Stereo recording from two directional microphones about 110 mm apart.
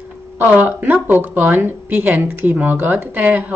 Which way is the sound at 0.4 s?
15° right (ahead or behind).